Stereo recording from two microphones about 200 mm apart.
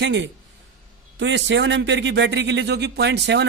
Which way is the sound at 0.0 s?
65° right (ahead or behind).